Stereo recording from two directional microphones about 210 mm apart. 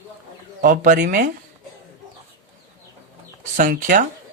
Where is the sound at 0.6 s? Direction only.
40° right (ahead or behind).